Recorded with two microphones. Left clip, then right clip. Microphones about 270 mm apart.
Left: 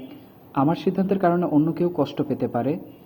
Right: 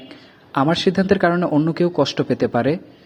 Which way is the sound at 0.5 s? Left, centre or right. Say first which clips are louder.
Right 5 dB; right.